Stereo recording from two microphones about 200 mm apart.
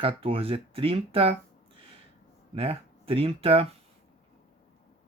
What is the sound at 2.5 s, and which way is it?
Speech, 30° right (ahead or behind).